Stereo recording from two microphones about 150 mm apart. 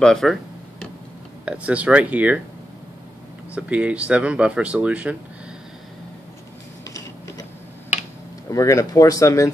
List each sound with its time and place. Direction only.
0.0 s a sound: centre (ahead or behind)
1.4 s speech: 10° right (ahead or behind)
3.5 s speech: 10° right (ahead or behind)
8.5 s speech: 20° left (ahead or behind)